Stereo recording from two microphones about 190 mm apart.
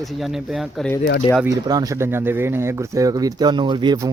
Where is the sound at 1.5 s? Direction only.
20° right (ahead or behind).